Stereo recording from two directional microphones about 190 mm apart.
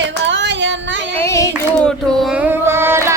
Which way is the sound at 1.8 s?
5° left (ahead or behind).